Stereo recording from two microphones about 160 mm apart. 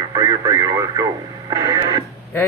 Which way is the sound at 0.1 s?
20° right (ahead or behind).